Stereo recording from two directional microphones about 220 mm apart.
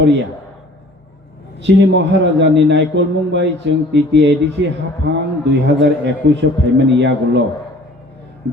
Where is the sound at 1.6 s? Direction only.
55° right (ahead or behind).